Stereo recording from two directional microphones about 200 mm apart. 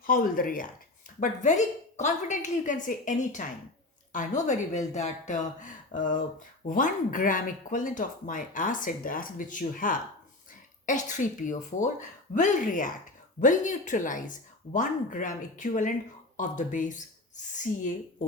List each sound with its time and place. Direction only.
0.0 s speech: 45° left (ahead or behind)